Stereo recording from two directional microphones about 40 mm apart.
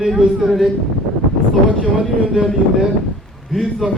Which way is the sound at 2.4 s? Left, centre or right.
Right.